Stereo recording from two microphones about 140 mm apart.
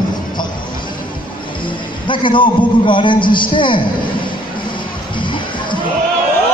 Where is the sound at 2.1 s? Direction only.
35° left (ahead or behind).